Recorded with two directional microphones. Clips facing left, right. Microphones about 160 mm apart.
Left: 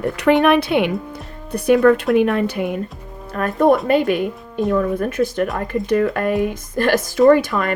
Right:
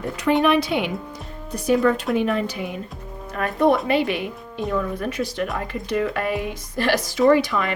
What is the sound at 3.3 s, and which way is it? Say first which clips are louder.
A woman's voice: left 4 dB; 45° left (ahead or behind).